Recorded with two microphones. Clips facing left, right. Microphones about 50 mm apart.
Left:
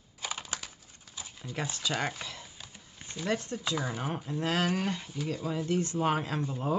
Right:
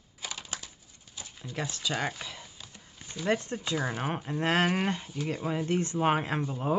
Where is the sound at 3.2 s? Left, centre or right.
Right.